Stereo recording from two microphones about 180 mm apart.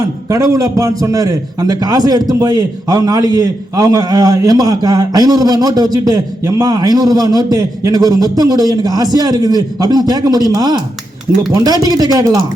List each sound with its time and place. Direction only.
0.0 s a man's voice: 20° right (ahead or behind)